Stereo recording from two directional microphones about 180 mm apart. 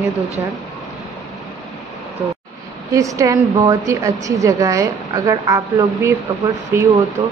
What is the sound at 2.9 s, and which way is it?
A woman's voice, 15° right (ahead or behind).